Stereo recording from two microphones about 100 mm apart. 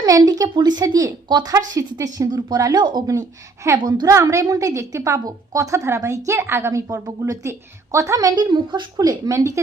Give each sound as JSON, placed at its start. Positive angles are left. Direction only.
{"t": 0.0, "sound": "a woman's voice", "side_deg": -35}
{"t": 3.8, "sound": "a woman's voice", "side_deg": -45}